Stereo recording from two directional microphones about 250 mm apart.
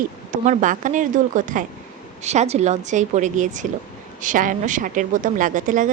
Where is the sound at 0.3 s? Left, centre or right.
Right.